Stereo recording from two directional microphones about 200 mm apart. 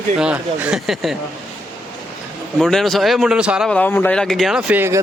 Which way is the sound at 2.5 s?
Centre (ahead or behind).